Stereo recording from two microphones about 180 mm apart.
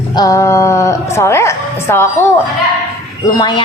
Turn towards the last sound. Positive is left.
turn(degrees=20)  # may be behind; listen again after turning